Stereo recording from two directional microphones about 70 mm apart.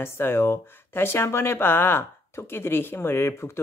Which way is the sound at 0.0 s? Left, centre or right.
Left.